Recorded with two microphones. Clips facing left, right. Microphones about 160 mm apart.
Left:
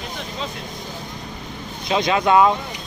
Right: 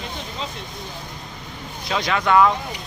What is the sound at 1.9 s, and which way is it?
Speech, 20° left (ahead or behind).